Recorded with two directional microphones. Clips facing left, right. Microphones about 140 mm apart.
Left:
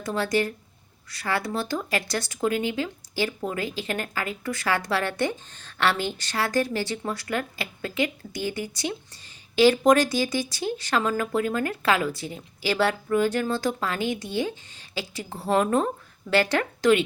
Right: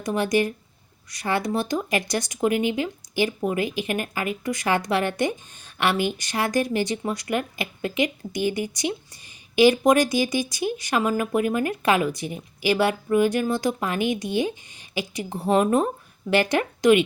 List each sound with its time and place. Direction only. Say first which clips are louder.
0.0 s speech: right 3 dB; 15° right (ahead or behind)